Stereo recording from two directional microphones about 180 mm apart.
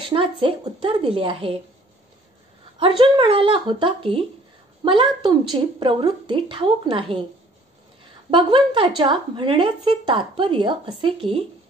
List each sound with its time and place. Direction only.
0.0 s a woman's voice: 30° right (ahead or behind)
2.8 s a woman's voice: 25° right (ahead or behind)
8.3 s a woman's voice: 25° right (ahead or behind)